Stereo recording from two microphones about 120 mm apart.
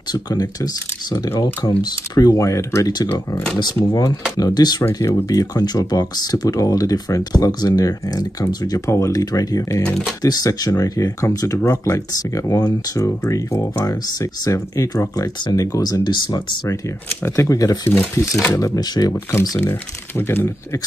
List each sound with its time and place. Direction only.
0.1 s speech: 35° left (ahead or behind)
3.5 s speech: 35° left (ahead or behind)
17.2 s speech: 25° left (ahead or behind)
18.8 s speech: 30° left (ahead or behind)
19.6 s speech: 20° left (ahead or behind)